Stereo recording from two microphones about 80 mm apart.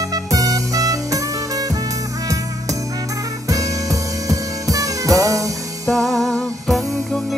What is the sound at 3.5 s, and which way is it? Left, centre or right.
Music, right.